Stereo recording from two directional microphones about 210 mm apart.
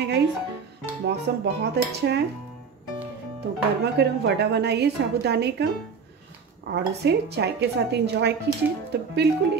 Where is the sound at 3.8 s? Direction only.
55° right (ahead or behind).